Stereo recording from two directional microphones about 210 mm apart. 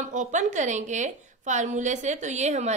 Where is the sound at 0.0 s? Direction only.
35° right (ahead or behind).